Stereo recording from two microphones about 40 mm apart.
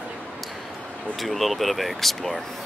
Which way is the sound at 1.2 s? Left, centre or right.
Centre.